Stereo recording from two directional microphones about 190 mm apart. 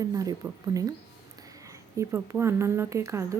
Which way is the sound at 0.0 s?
20° right (ahead or behind).